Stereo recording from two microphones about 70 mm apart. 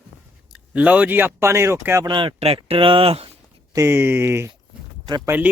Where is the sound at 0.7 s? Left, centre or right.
Right.